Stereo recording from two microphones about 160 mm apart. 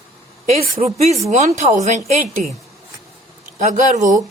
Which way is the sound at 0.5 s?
50° right (ahead or behind).